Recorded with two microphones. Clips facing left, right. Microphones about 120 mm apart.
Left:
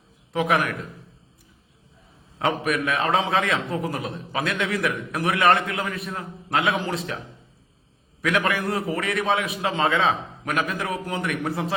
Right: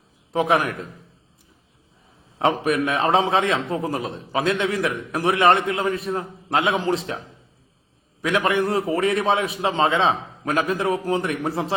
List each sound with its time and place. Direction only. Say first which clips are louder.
0.3 s a man's voice: right 2 dB; 30° right (ahead or behind)
2.4 s a man's voice: right 3 dB; 30° right (ahead or behind)
8.2 s a man's voice: right 3 dB; 25° right (ahead or behind)